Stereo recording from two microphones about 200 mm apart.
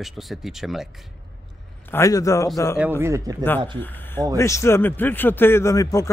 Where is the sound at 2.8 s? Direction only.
10° right (ahead or behind).